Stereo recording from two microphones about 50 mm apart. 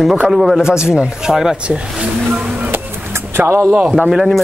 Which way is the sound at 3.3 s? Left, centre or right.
Right.